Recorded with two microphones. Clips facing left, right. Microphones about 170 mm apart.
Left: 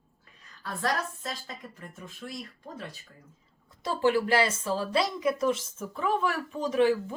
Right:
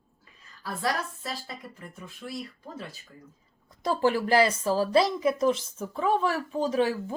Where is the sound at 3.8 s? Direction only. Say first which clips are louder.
Right 1 dB; 40° right (ahead or behind).